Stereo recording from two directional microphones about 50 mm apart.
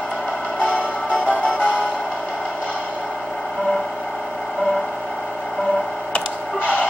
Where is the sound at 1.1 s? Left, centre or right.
Left.